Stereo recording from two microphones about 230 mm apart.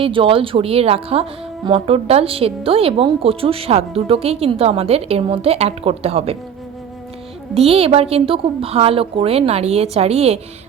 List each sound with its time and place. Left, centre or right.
0.0 s a woman's voice: right
7.5 s a woman's voice: right